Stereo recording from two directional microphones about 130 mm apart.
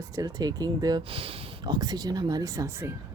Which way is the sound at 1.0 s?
45° right (ahead or behind).